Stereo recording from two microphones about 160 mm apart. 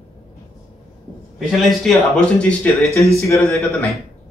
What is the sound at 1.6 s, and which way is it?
Speech, centre (ahead or behind).